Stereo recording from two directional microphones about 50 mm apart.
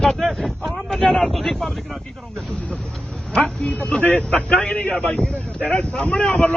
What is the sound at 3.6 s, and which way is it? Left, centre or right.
Speech, left.